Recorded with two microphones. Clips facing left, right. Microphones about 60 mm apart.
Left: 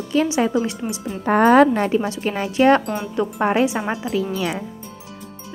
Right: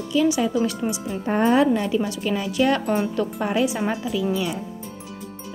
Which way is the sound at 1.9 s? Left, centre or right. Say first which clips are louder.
Left 2 dB; left.